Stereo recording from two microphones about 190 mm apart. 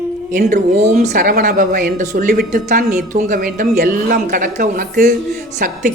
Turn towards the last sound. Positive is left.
turn(degrees=-45)  # may be behind; listen again after turning